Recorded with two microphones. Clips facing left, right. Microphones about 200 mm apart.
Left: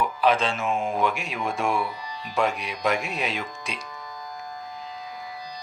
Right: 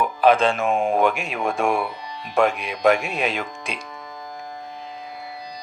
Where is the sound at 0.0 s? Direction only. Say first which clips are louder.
Right 5 dB; 50° right (ahead or behind).